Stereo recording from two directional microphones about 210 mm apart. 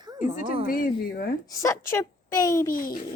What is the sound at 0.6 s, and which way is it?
Speech, 40° left (ahead or behind).